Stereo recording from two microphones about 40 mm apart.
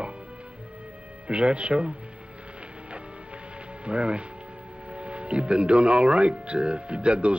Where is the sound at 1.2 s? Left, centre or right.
Right.